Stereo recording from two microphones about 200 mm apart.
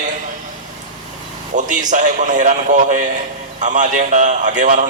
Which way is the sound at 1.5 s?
40° right (ahead or behind).